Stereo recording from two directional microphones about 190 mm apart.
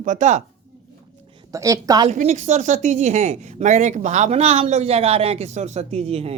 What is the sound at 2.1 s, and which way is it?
Speech, 35° right (ahead or behind).